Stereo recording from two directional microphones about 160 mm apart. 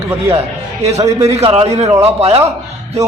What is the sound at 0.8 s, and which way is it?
A man's voice, 45° right (ahead or behind).